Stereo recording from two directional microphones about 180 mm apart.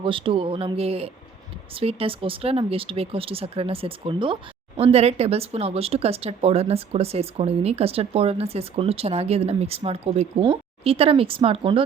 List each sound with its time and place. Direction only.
0.0 s a woman's voice: 30° right (ahead or behind)